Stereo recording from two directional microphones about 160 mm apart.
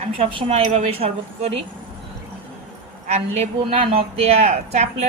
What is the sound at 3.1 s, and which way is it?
A woman's voice, 40° right (ahead or behind).